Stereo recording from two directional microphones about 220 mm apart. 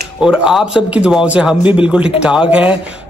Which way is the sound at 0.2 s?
Centre (ahead or behind).